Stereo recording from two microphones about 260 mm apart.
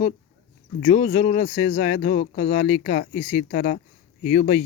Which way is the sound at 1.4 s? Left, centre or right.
Left.